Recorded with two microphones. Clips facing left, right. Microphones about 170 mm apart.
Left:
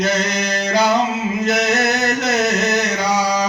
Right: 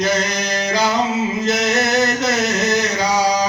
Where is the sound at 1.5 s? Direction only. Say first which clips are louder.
Left 2 dB; 60° left (ahead or behind).